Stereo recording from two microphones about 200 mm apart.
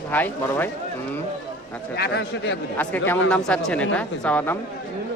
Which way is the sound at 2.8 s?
10° left (ahead or behind).